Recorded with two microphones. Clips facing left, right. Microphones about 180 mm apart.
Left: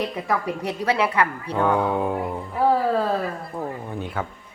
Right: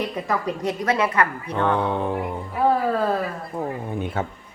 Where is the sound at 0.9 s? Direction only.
15° left (ahead or behind).